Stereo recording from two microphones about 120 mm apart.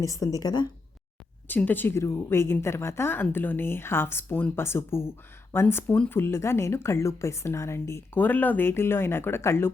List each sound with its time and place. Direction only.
0.0 s a woman's voice: 30° left (ahead or behind)
1.5 s a woman's voice: 15° left (ahead or behind)